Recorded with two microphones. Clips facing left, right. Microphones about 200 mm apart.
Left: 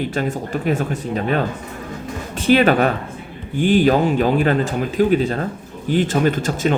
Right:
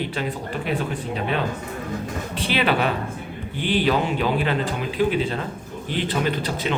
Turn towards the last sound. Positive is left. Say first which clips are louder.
# left 6 dB
turn(degrees=45)  # may be behind; listen again after turning